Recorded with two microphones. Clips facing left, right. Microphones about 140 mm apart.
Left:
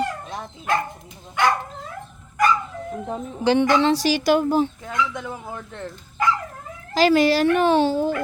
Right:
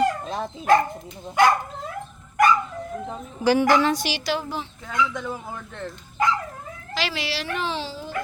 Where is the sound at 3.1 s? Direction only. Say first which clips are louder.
Left 1 dB; 25° left (ahead or behind).